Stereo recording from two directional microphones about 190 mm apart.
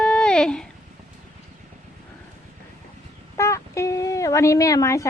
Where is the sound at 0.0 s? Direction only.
5° left (ahead or behind).